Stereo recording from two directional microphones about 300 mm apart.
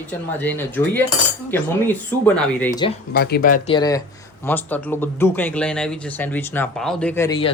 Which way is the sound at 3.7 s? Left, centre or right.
Centre.